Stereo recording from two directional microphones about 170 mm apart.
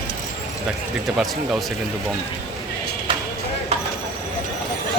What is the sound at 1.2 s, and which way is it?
Speech, centre (ahead or behind).